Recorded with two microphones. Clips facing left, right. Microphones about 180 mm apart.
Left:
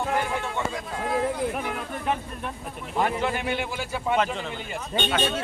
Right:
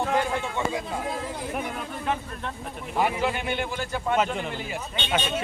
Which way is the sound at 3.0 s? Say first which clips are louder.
Even; centre (ahead or behind).